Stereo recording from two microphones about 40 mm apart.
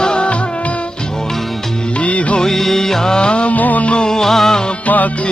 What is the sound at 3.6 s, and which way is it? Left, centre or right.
Music, left.